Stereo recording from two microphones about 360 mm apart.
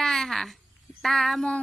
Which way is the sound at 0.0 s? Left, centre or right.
Centre.